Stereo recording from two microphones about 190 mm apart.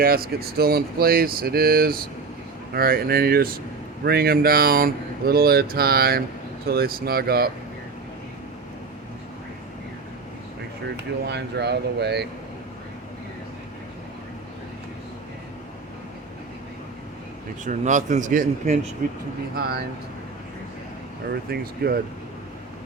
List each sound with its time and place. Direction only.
0.0 s speech: 55° right (ahead or behind)
11.3 s speech: 60° right (ahead or behind)
17.7 s speech: 40° right (ahead or behind)
19.5 s speech: 55° right (ahead or behind)
21.5 s speech: 55° right (ahead or behind)